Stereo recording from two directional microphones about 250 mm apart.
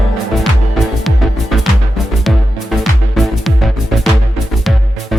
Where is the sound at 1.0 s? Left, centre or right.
Centre.